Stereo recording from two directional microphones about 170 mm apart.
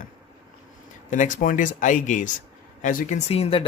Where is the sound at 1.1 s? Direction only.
50° left (ahead or behind).